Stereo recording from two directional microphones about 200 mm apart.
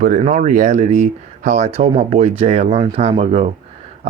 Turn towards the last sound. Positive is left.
turn(degrees=-30)  # may be behind; listen again after turning